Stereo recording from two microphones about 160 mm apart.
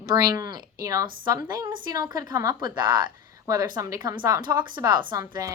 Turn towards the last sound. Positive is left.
turn(degrees=-20)  # may be behind; listen again after turning